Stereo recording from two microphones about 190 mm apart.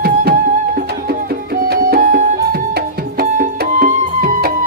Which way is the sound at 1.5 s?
50° right (ahead or behind).